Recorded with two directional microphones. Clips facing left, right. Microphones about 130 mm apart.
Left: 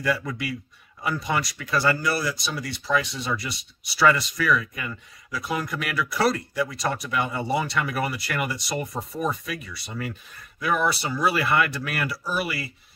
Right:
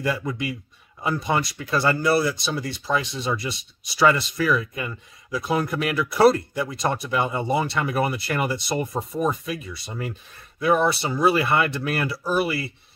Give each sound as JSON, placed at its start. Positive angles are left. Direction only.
{"t": 0.0, "sound": "speech", "side_deg": -25}